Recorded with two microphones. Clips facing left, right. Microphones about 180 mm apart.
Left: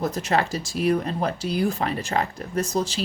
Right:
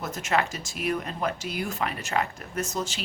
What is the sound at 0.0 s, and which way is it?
Speech, 35° left (ahead or behind).